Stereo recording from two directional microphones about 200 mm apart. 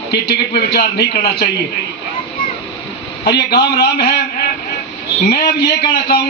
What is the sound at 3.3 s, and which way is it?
Speech, 55° left (ahead or behind).